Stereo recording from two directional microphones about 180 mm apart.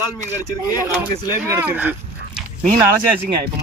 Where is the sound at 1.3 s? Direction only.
15° right (ahead or behind).